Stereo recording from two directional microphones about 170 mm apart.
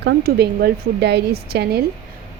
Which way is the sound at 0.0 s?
80° right.